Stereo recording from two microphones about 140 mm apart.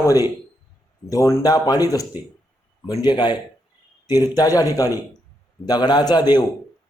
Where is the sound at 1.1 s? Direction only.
25° left (ahead or behind).